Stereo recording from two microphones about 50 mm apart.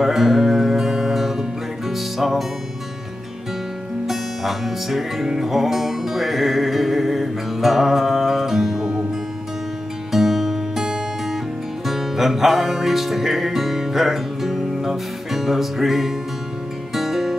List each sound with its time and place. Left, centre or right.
0.0 s music: centre
4.1 s music: centre
10.1 s music: centre